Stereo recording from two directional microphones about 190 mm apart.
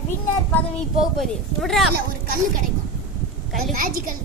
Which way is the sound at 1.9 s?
50° right (ahead or behind).